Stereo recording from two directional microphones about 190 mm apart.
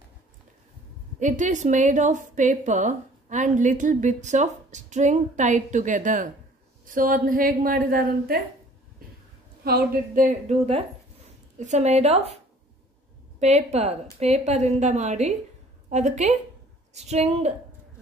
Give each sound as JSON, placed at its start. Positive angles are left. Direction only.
{"t": 1.2, "sound": "a woman's voice", "side_deg": -40}
{"t": 9.7, "sound": "a woman's voice", "side_deg": -50}
{"t": 10.5, "sound": "speech", "side_deg": -35}
{"t": 13.4, "sound": "a woman's voice", "side_deg": -35}